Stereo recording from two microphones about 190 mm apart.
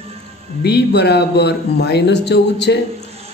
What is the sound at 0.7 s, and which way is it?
Speech, 60° left (ahead or behind).